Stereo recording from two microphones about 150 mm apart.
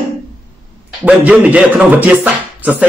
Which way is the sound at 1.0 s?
10° right (ahead or behind).